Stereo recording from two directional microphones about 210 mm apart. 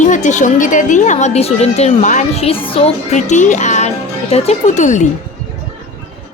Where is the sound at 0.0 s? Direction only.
35° left (ahead or behind).